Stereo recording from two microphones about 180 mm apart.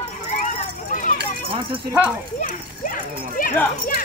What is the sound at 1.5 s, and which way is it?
Speech, 30° right (ahead or behind).